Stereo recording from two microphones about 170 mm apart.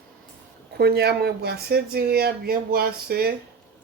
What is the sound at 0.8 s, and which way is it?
Speech, 70° right (ahead or behind).